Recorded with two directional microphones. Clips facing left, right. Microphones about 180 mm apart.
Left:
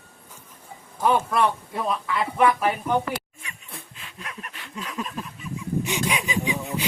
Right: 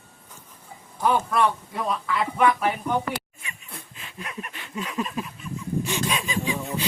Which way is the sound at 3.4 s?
5° right (ahead or behind).